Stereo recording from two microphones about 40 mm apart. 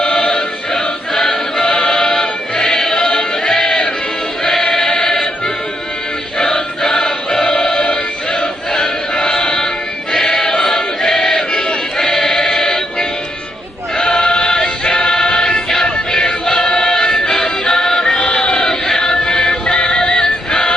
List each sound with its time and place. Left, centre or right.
0.0 s choir: centre
4.9 s music: centre
6.4 s choir: centre
8.7 s music: centre
10.1 s choir: centre
14.0 s choir: centre
14.5 s choir: centre
15.7 s music: centre